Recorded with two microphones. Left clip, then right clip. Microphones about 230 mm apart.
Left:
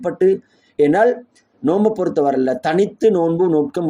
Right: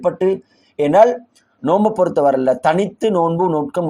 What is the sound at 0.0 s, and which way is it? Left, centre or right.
Speech, centre.